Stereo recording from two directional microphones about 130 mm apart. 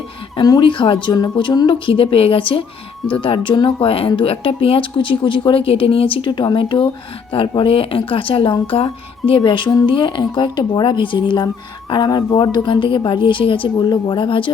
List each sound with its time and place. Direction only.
0.3 s speech: 35° left (ahead or behind)